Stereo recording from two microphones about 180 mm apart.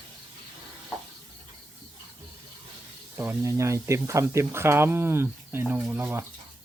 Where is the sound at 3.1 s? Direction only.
15° right (ahead or behind).